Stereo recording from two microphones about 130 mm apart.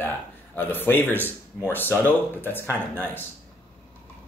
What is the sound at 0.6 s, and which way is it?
Speech, 15° left (ahead or behind).